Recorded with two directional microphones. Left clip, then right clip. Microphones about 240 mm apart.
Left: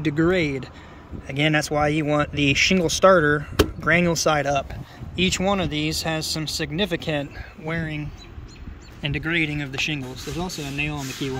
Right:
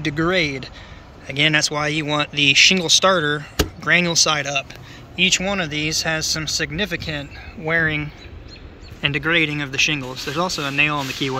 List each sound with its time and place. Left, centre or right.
0.0 s speech: centre